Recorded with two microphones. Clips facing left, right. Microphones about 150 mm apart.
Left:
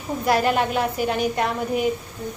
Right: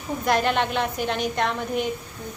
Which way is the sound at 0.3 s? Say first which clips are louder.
Left 2 dB; 5° left (ahead or behind).